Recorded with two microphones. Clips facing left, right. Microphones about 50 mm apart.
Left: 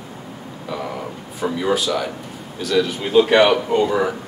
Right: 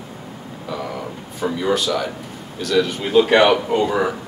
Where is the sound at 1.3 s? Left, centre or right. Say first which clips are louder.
Even; centre.